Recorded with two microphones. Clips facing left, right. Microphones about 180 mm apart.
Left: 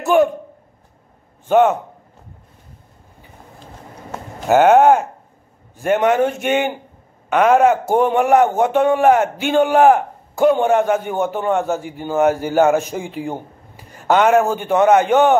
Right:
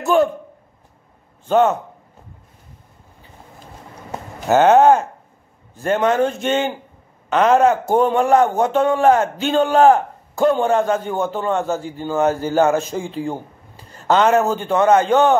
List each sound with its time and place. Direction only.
0.0 s a man's voice: 15° left (ahead or behind)
1.5 s a man's voice: 15° left (ahead or behind)
4.5 s a man's voice: 15° left (ahead or behind)